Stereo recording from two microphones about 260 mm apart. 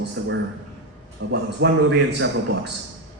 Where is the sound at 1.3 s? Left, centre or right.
Right.